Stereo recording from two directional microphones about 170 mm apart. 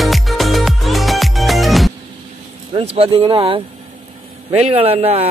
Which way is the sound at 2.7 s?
35° right (ahead or behind).